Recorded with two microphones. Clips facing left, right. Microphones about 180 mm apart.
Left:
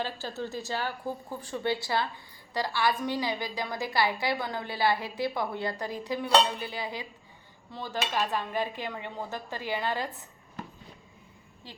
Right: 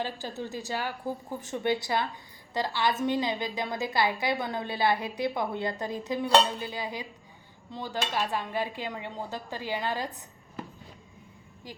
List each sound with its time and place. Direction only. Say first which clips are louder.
0.0 s a woman's voice: even; 15° right (ahead or behind)